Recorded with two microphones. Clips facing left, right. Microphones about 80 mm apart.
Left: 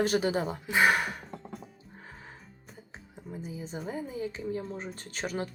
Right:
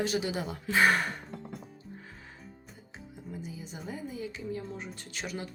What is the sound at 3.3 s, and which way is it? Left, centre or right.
Music, left.